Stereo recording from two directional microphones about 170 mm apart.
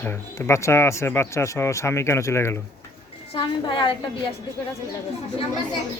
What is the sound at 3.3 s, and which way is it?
Speech, 30° left (ahead or behind).